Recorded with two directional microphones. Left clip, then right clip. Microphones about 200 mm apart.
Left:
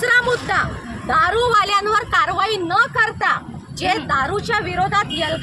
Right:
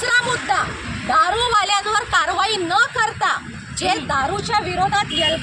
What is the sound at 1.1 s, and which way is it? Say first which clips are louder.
A woman's voice: left 1 dB; 5° left (ahead or behind).